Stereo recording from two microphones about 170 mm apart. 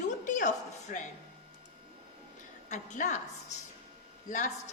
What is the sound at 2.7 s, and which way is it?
Speech, 45° left (ahead or behind).